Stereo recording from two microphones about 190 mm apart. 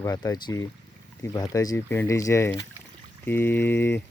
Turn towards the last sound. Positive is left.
turn(degrees=10)  # may be behind; listen again after turning